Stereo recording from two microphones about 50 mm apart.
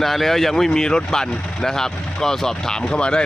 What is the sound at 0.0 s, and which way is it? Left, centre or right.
Speech, centre.